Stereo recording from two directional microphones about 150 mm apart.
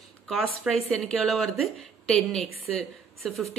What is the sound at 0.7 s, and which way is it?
Speech, centre (ahead or behind).